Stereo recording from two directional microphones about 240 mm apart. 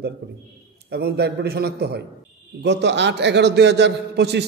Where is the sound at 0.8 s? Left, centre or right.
Right.